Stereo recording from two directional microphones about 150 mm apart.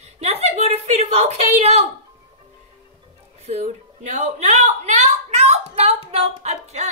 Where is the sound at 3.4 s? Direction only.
45° right (ahead or behind).